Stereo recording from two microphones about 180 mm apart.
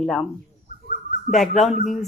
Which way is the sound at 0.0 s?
Centre (ahead or behind).